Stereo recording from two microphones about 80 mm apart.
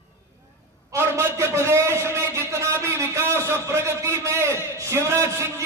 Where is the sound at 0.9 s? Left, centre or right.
Right.